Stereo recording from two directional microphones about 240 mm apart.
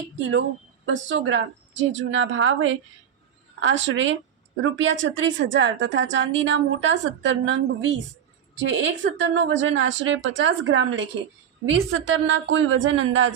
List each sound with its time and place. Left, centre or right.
0.9 s a woman's voice: right